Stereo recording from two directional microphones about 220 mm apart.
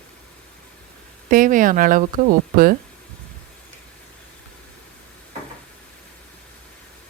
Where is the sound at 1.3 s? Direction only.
40° right (ahead or behind).